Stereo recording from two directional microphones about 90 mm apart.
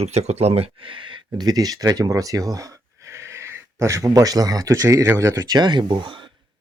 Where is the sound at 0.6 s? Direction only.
85° right; by 1.2 s 70° right (ahead or behind).